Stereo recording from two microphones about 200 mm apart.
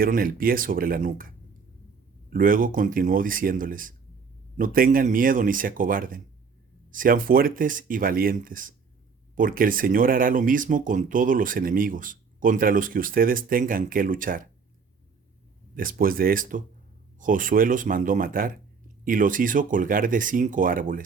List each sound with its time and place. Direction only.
0.0 s speech: 45° right (ahead or behind)
2.3 s speech: 45° right (ahead or behind)
15.7 s speech: 45° right (ahead or behind)